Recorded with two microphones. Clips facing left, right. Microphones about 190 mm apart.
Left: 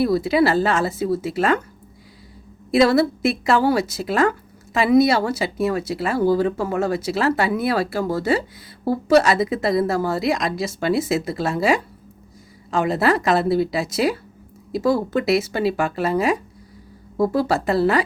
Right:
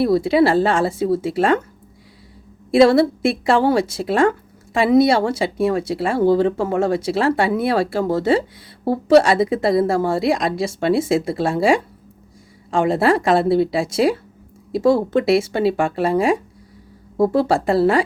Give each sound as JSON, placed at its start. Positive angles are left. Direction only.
{"t": 0.0, "sound": "a woman's voice", "side_deg": -30}
{"t": 2.7, "sound": "a woman's voice", "side_deg": -30}